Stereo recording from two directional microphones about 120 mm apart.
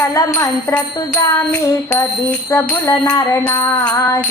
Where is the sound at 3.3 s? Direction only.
20° left (ahead or behind).